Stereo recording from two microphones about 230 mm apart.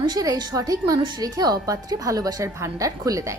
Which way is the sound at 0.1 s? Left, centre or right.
Centre.